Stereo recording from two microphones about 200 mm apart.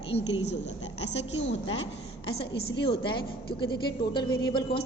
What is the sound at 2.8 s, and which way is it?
A woman's voice, 25° left (ahead or behind).